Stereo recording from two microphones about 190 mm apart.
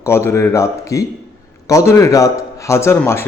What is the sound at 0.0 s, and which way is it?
A man's voice, 15° left (ahead or behind).